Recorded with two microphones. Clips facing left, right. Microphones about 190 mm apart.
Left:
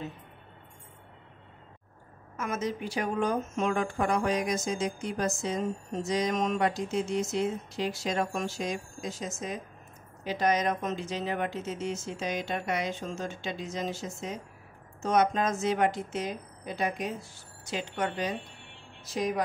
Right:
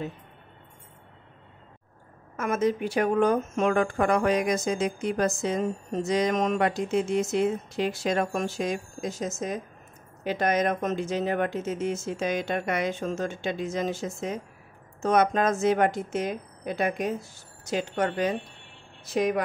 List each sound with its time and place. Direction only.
2.3 s speech: 55° right (ahead or behind)